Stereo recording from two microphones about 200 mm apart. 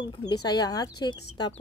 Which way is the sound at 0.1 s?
20° left (ahead or behind).